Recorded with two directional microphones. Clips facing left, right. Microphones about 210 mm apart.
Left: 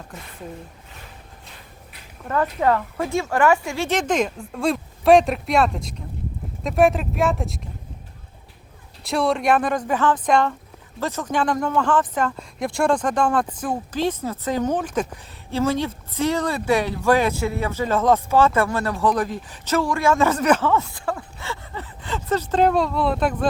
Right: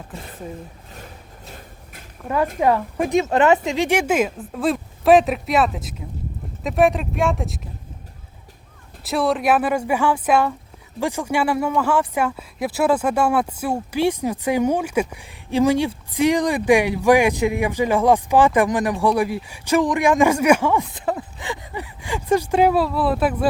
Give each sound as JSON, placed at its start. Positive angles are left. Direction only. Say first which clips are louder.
{"t": 2.2, "sound": "speech", "louder": "right 2 dB", "side_deg": -10}
{"t": 9.0, "sound": "speech", "louder": "right 1 dB", "side_deg": 0}